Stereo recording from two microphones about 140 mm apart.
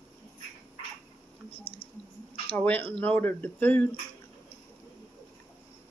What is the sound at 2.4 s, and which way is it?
Speech, 10° left (ahead or behind).